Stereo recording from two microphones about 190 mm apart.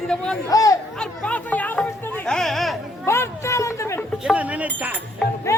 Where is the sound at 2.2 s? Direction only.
Centre (ahead or behind).